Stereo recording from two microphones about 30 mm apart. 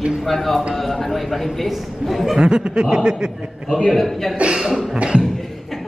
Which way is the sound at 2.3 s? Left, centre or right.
Right.